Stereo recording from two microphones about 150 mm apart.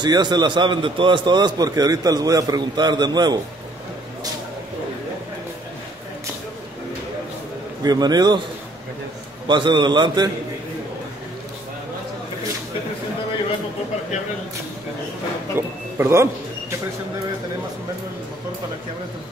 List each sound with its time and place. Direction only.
0.0 s a man's voice: 30° right (ahead or behind)
7.8 s a man's voice: 25° right (ahead or behind)
9.5 s a man's voice: 30° right (ahead or behind)
15.6 s a sound: 15° right (ahead or behind)
16.0 s speech: 20° right (ahead or behind)